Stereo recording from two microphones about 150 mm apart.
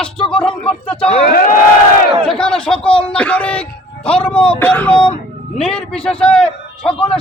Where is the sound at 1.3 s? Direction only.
70° left (ahead or behind).